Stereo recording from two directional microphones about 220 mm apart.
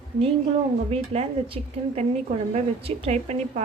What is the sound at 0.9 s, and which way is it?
A woman's voice, 25° right (ahead or behind).